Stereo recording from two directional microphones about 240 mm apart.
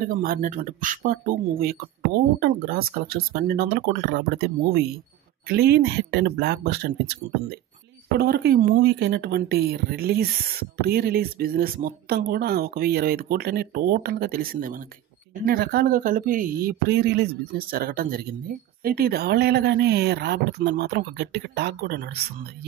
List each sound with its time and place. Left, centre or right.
0.0 s speech: right
5.5 s speech: right